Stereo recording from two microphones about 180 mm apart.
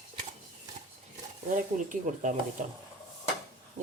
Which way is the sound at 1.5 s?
45° right (ahead or behind).